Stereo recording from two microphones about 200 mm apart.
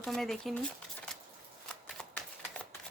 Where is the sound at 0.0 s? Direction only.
Centre (ahead or behind).